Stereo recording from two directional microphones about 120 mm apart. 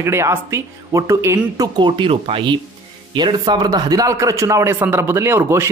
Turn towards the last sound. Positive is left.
turn(degrees=-20)  # may be behind; listen again after turning